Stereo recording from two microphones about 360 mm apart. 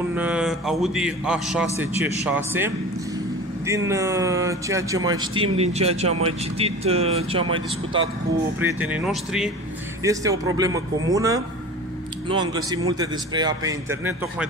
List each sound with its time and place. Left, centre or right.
0.1 s a man's voice: centre